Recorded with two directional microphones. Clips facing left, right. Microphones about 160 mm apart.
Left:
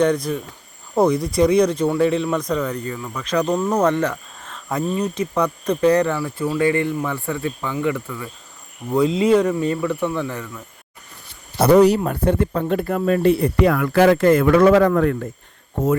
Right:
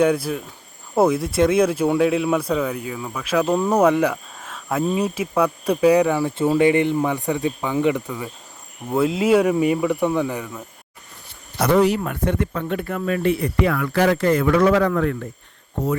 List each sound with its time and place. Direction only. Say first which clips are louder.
0.0 s speech: even; 5° right (ahead or behind)
8.9 s speech: left 1 dB; 5° right (ahead or behind)
11.7 s speech: left 4 dB; 40° left (ahead or behind)
13.7 s speech: left 4 dB; 50° left (ahead or behind)